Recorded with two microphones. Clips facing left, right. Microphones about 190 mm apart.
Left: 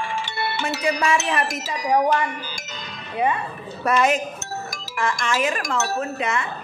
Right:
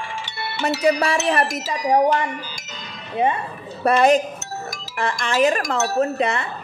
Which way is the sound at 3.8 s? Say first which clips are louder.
Right 4 dB; 35° right (ahead or behind).